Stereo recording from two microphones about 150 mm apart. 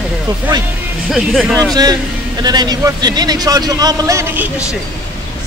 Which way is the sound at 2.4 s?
25° right (ahead or behind).